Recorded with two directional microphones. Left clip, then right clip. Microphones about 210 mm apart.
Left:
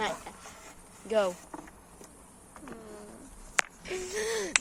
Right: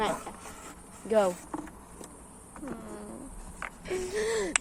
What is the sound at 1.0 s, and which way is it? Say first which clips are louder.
Speech: right 2 dB; 10° left (ahead or behind).